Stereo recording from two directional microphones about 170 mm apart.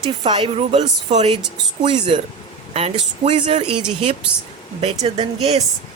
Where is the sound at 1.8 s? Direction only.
30° right (ahead or behind).